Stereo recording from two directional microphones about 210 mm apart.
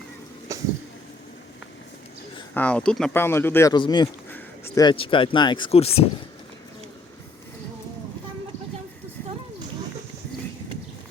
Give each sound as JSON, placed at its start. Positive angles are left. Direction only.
{"t": 0.5, "sound": "a sound", "side_deg": -15}
{"t": 2.6, "sound": "speech", "side_deg": 5}
{"t": 4.3, "sound": "speech", "side_deg": 10}